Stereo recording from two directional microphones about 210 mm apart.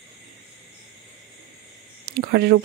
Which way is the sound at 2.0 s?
45° right (ahead or behind).